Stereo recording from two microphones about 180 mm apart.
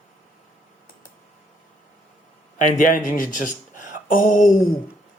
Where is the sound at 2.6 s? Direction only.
45° left (ahead or behind).